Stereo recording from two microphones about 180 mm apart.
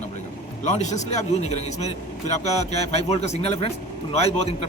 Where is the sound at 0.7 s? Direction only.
40° left (ahead or behind).